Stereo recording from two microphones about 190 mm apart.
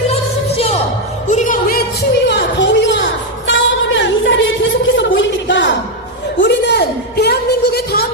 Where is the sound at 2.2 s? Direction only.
65° left (ahead or behind).